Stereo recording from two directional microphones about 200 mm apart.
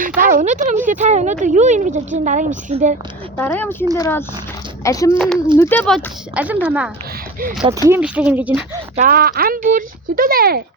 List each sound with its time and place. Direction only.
0.2 s speech: 40° right (ahead or behind)
3.3 s speech: 10° left (ahead or behind)
5.1 s speech: 5° left (ahead or behind)
9.0 s speech: 45° right (ahead or behind)